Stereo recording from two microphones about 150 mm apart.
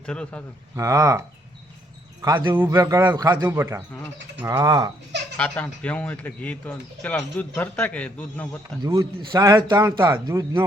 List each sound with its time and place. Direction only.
0.0 s a man's voice: 5° left (ahead or behind)
0.8 s a man's voice: 20° right (ahead or behind)
2.2 s a man's voice: 25° right (ahead or behind)
5.4 s a man's voice: 10° left (ahead or behind)
8.8 s a man's voice: 25° right (ahead or behind)